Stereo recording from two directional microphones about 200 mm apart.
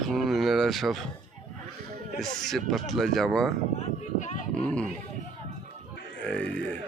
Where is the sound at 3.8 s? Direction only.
35° left (ahead or behind).